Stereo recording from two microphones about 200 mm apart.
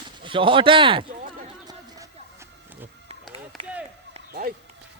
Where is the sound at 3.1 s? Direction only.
30° right (ahead or behind).